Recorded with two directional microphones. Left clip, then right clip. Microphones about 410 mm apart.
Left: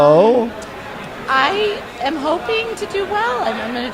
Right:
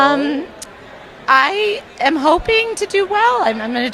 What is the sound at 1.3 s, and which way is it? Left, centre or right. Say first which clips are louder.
A woman's voice: right 3 dB; right.